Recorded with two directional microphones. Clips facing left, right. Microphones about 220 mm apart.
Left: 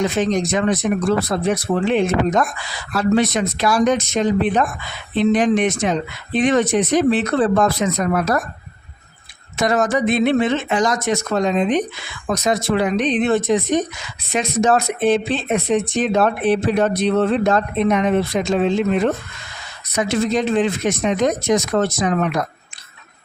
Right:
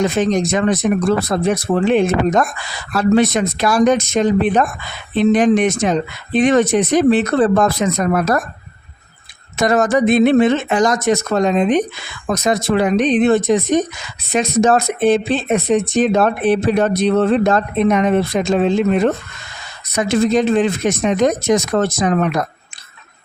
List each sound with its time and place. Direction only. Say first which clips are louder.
0.2 s speech: right 2 dB; 45° right (ahead or behind)
9.6 s speech: right 3 dB; 45° right (ahead or behind)
20.0 s speech: right 4 dB; 45° right (ahead or behind)